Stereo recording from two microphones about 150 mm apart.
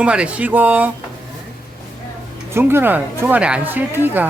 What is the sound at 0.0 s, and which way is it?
Speech, 5° right (ahead or behind).